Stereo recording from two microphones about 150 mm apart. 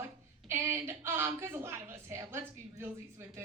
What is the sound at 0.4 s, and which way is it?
A woman's voice, 20° right (ahead or behind).